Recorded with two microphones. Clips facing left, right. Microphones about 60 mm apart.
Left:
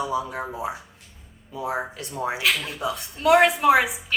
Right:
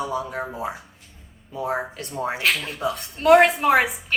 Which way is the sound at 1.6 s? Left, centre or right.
Right.